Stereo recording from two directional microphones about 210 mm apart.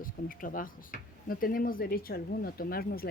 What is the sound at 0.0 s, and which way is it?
Speech, 40° left (ahead or behind).